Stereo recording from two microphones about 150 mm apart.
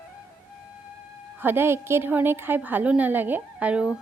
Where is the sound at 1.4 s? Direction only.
15° right (ahead or behind).